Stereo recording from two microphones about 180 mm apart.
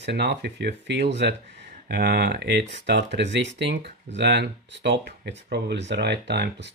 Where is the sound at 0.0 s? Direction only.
70° right (ahead or behind).